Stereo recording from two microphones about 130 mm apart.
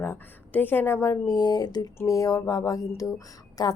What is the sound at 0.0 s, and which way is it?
A woman's voice, 15° left (ahead or behind).